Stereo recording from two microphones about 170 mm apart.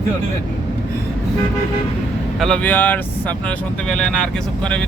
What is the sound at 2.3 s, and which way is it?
Speech, 5° left (ahead or behind).